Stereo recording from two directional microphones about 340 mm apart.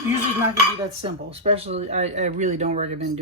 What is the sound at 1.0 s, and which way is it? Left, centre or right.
Speech, centre.